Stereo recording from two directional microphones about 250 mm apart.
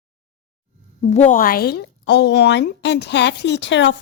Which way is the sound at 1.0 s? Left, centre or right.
Left.